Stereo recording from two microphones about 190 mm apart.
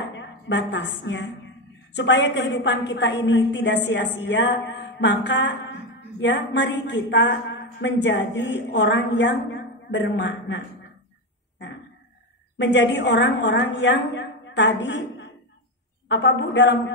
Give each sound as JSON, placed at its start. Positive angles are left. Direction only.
{"t": 0.1, "sound": "a woman's voice", "side_deg": 70}
{"t": 12.5, "sound": "a woman's voice", "side_deg": 70}